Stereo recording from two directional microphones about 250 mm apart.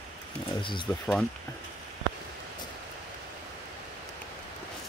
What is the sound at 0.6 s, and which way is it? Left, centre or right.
Speech, centre.